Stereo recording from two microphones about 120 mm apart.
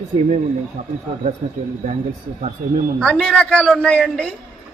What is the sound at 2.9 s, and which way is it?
A woman's voice, 5° left (ahead or behind).